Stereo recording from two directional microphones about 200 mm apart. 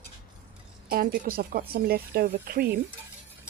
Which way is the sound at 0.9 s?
50° right (ahead or behind).